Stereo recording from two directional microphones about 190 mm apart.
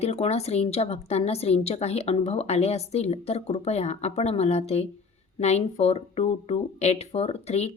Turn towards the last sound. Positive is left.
turn(degrees=35)  # may be behind; listen again after turning